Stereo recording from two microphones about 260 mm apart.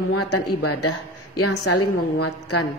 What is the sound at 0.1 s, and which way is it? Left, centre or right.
Speech, left.